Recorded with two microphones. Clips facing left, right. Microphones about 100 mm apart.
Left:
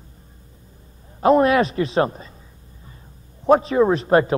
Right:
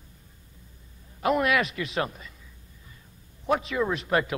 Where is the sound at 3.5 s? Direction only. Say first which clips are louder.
Left 10 dB; 35° left (ahead or behind).